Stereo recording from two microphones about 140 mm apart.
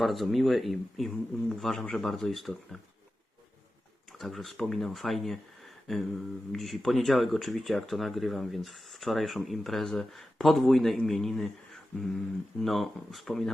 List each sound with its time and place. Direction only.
0.0 s speech: centre (ahead or behind)
4.2 s speech: centre (ahead or behind)